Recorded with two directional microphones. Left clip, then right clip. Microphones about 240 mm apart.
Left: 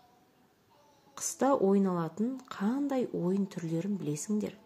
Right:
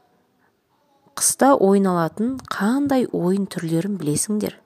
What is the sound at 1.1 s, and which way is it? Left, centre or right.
A woman's voice, right.